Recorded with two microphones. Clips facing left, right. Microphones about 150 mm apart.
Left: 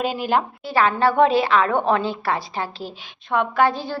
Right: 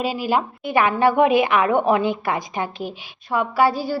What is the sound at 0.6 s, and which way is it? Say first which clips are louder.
A woman's voice: right 3 dB; 15° right (ahead or behind).